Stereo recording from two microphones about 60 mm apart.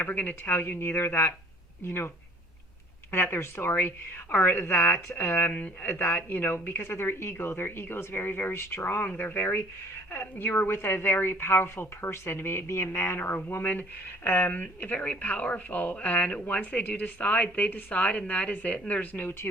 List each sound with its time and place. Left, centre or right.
0.0 s speech: left
3.1 s speech: left